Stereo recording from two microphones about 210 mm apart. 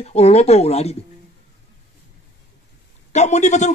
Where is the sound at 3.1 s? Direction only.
35° left (ahead or behind).